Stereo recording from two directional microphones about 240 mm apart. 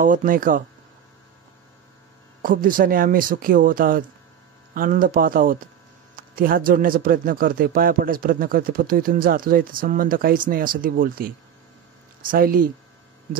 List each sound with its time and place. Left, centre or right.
0.0 s speech: right
2.4 s speech: right